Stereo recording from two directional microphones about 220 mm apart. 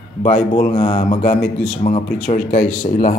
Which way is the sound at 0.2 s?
40° left (ahead or behind).